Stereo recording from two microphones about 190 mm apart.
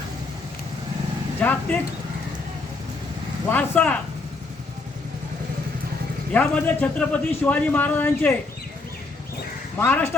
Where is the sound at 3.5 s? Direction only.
10° left (ahead or behind).